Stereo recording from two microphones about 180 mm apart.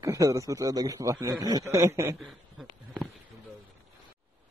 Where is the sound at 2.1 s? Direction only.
Centre (ahead or behind).